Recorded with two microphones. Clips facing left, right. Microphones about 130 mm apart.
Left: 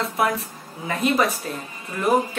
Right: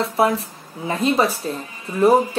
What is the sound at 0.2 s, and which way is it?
Speech, 30° right (ahead or behind).